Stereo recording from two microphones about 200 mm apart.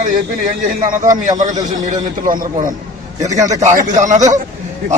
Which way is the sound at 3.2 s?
15° right (ahead or behind).